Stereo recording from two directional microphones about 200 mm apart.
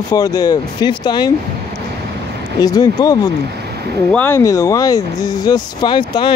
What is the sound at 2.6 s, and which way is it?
Speech, 20° left (ahead or behind).